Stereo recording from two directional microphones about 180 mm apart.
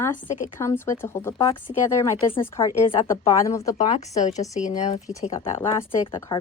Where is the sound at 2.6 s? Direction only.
30° left (ahead or behind).